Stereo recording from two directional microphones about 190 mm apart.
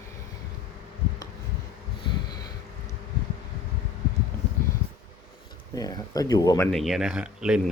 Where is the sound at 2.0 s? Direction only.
25° left (ahead or behind).